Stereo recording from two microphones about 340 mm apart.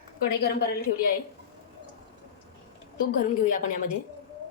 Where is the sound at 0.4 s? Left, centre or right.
Left.